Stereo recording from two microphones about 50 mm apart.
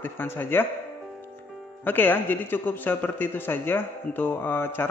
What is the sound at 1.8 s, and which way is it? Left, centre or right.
Speech, left.